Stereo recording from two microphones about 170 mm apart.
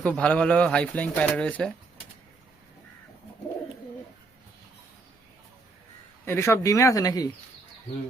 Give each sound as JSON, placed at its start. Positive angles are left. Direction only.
{"t": 0.0, "sound": "speech", "side_deg": 5}
{"t": 6.2, "sound": "speech", "side_deg": 15}